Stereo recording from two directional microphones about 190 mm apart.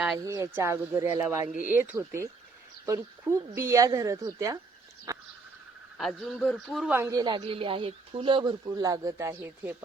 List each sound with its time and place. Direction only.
0.5 s speech: 15° right (ahead or behind)
5.1 s a sound: 20° right (ahead or behind)
6.0 s a man's voice: centre (ahead or behind)
6.9 s speech: 15° right (ahead or behind)